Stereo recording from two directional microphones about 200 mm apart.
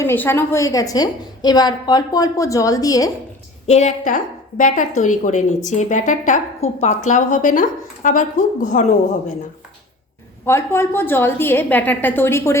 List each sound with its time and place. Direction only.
0.0 s a woman's voice: 10° left (ahead or behind)
3.7 s a woman's voice: 35° left (ahead or behind)
10.4 s a woman's voice: 10° left (ahead or behind)